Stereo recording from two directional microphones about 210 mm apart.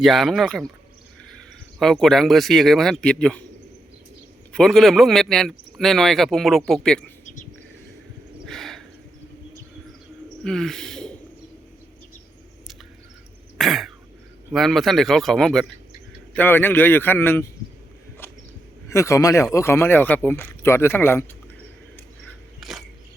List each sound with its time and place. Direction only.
0.0 s a man's voice: centre (ahead or behind)
1.8 s a man's voice: centre (ahead or behind)
4.5 s a man's voice: centre (ahead or behind)
8.4 s a sound: centre (ahead or behind)
10.4 s speech: centre (ahead or behind)
13.6 s cough: centre (ahead or behind)
14.5 s a man's voice: centre (ahead or behind)
18.2 s a sound: 10° left (ahead or behind)
18.9 s speech: 15° left (ahead or behind)
22.6 s a sound: centre (ahead or behind)